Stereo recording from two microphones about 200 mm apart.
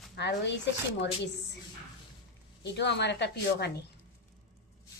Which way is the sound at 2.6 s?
60° left (ahead or behind).